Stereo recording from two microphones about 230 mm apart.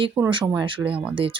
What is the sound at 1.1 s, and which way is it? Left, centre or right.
Speech, right.